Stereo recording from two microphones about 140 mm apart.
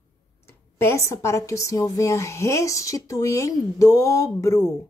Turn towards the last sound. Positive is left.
turn(degrees=20)  # may be behind; listen again after turning